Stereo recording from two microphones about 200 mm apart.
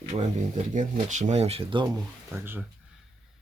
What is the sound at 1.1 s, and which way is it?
Speech, 35° right (ahead or behind).